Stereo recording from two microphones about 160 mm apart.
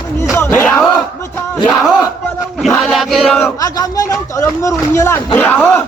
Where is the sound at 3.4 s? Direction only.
20° left (ahead or behind).